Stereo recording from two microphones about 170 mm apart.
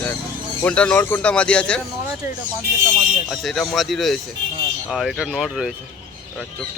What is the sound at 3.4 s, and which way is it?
Speech, centre (ahead or behind).